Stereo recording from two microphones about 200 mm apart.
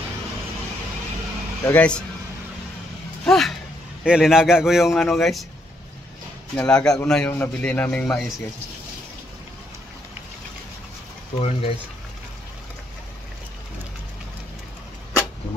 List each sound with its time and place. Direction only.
1.7 s a man's voice: 5° left (ahead or behind)
3.3 s a man's voice: centre (ahead or behind)
6.5 s a man's voice: 5° left (ahead or behind)
11.3 s speech: 30° left (ahead or behind)